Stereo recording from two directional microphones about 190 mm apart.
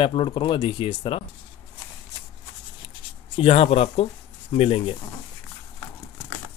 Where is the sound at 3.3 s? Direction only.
30° left (ahead or behind).